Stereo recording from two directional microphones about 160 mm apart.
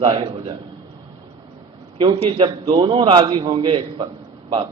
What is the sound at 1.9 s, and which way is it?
A man's voice, 30° right (ahead or behind).